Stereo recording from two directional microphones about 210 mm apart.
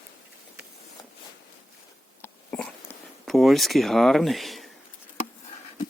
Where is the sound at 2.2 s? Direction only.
10° left (ahead or behind).